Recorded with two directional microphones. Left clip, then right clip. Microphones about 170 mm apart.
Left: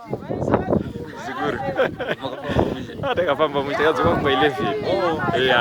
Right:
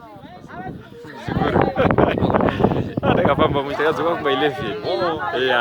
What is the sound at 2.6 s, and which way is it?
Speech, centre (ahead or behind).